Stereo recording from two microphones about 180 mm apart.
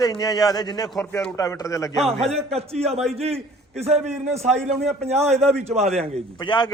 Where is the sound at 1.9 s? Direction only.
Centre (ahead or behind).